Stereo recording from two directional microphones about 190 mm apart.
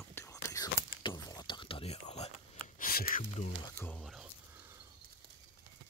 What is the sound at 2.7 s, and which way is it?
Speech, 50° left (ahead or behind).